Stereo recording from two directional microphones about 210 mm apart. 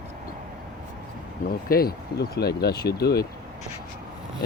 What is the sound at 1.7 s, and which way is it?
Speech, 45° left (ahead or behind).